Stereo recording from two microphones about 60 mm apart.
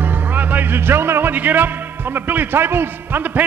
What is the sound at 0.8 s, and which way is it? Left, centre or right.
Speech, right.